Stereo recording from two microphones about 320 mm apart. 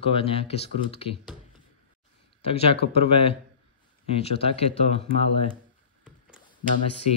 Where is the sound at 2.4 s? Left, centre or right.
Centre.